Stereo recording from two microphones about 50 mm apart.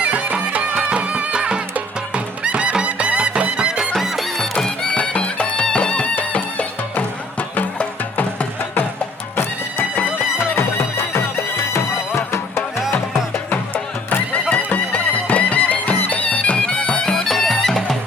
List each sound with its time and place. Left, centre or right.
0.0 s music: right
3.9 s music: centre
4.4 s music: centre
4.9 s music: left
10.5 s music: left
14.5 s music: left; by 17.9 s centre